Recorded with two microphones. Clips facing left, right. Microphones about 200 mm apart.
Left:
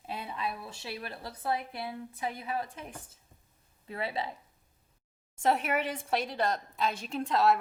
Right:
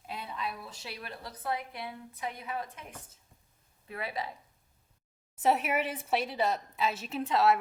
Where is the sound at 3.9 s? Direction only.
25° left (ahead or behind).